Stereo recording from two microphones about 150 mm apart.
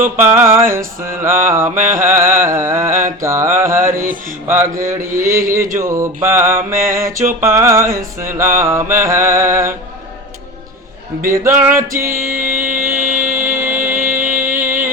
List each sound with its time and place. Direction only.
0.2 s music: 15° right (ahead or behind)
5.1 s mantra: 20° right (ahead or behind)
7.4 s music: 15° right (ahead or behind)
8.2 s mantra: 20° right (ahead or behind)
8.5 s music: 20° right (ahead or behind)
11.3 s music: 15° right (ahead or behind)
12.1 s music: 65° right (ahead or behind)
12.6 s a sound: 65° right (ahead or behind)